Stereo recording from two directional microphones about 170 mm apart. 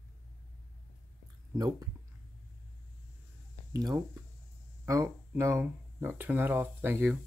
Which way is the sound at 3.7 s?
20° right (ahead or behind).